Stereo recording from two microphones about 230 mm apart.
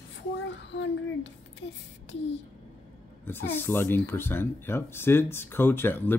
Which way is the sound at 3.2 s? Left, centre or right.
Centre.